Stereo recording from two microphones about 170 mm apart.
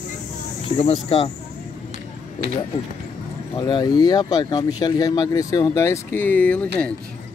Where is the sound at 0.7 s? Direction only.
35° left (ahead or behind).